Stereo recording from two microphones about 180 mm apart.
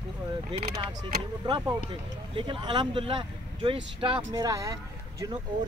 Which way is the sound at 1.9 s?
30° right (ahead or behind).